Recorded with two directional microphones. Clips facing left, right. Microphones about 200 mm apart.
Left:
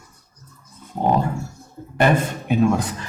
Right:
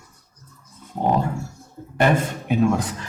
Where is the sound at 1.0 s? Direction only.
30° left (ahead or behind).